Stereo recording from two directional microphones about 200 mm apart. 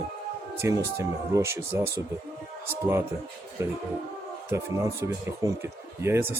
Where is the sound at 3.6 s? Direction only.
15° right (ahead or behind).